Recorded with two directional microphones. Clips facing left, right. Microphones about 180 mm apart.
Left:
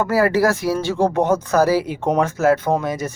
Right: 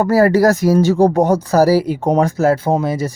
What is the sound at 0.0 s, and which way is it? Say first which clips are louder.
Speech: right 5 dB; 40° right (ahead or behind).